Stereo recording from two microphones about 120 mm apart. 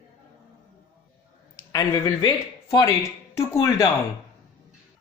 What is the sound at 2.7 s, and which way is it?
Speech, 25° left (ahead or behind).